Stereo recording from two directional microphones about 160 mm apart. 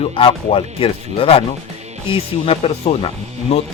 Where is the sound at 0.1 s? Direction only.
35° left (ahead or behind).